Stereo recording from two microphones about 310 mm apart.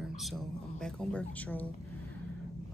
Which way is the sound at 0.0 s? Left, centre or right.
Centre.